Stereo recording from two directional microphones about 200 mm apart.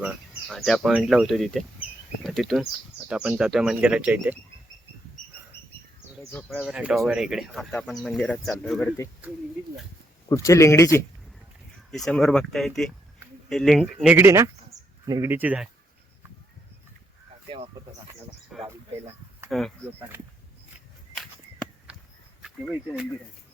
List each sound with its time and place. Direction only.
0.0 s speech: 5° right (ahead or behind)
6.3 s speech: 5° left (ahead or behind)
6.7 s speech: 5° right (ahead or behind)
10.2 s speech: 15° left (ahead or behind)
11.9 s speech: centre (ahead or behind)
17.7 s speech: 15° right (ahead or behind)
18.5 s speech: centre (ahead or behind)
19.8 s speech: 10° right (ahead or behind)